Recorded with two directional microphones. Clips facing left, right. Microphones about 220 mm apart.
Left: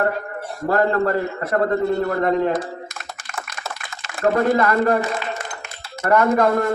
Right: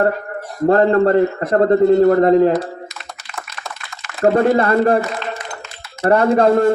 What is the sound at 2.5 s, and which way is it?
Typing, 50° left (ahead or behind).